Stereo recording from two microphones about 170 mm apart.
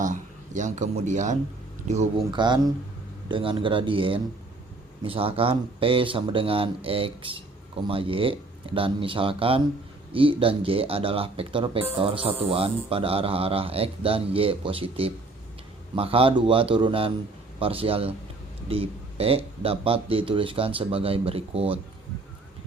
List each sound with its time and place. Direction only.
0.0 s speech: 45° right (ahead or behind)
2.3 s speech: 25° right (ahead or behind)